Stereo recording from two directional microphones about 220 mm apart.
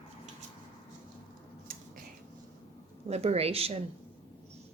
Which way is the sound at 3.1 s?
30° right (ahead or behind).